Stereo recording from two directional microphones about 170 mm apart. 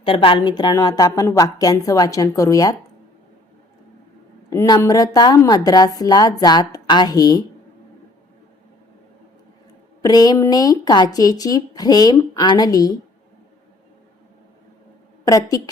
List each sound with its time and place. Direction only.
0.0 s speech: 30° left (ahead or behind)
4.4 s speech: 20° left (ahead or behind)
10.0 s speech: 25° left (ahead or behind)
15.2 s speech: 20° left (ahead or behind)